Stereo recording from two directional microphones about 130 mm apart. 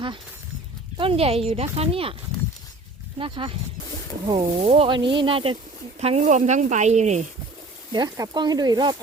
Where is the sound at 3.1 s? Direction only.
40° right (ahead or behind).